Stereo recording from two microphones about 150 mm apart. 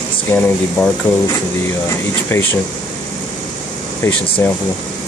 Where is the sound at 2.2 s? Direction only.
15° left (ahead or behind).